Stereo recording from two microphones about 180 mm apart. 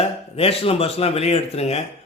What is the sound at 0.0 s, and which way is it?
Speech, 35° left (ahead or behind).